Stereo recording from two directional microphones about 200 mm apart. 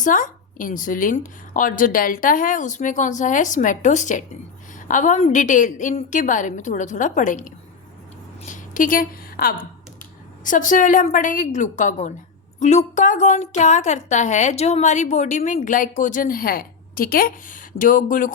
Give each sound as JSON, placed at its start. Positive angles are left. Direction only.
{"t": 0.0, "sound": "a woman's voice", "side_deg": 40}